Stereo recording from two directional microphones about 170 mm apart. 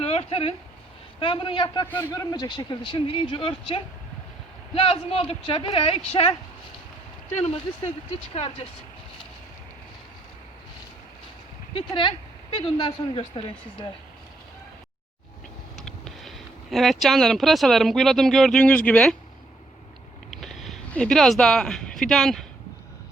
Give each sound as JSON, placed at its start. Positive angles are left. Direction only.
{"t": 0.0, "sound": "a man's voice", "side_deg": 35}
{"t": 1.9, "sound": "a man's voice", "side_deg": 15}
{"t": 8.3, "sound": "speech", "side_deg": 35}
{"t": 11.7, "sound": "speech", "side_deg": 30}
{"t": 15.8, "sound": "speech", "side_deg": 5}
{"t": 20.3, "sound": "speech", "side_deg": 0}